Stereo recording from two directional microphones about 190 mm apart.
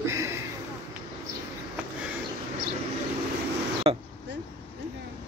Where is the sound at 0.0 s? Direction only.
15° right (ahead or behind).